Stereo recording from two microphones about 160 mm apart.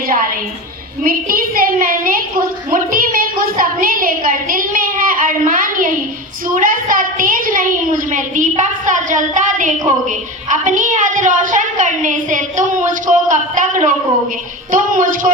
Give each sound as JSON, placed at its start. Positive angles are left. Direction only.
{"t": 1.0, "sound": "a woman's voice", "side_deg": -60}